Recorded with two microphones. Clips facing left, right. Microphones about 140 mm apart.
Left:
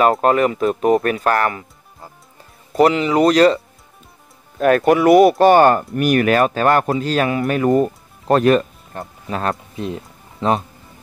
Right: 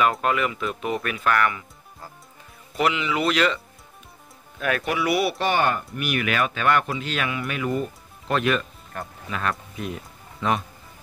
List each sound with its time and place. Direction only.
0.0 s speech: 40° left (ahead or behind)
2.7 s speech: 40° left (ahead or behind)